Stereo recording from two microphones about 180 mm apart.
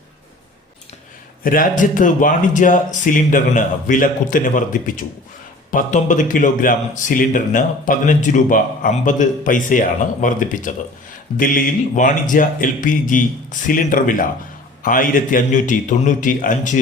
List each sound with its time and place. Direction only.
1.5 s a man's voice: 50° left (ahead or behind)